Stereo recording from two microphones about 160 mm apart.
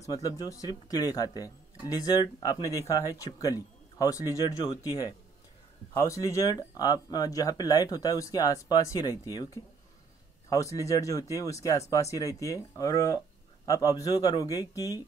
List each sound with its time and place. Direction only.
0.0 s speech: 20° left (ahead or behind)